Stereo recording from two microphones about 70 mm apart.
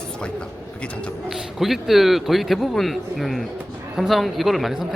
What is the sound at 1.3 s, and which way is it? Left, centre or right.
Speech, centre.